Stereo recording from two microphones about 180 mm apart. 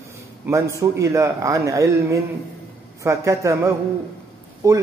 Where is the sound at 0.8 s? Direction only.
15° right (ahead or behind).